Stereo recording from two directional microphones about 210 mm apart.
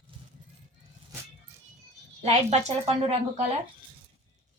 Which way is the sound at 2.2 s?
30° right (ahead or behind).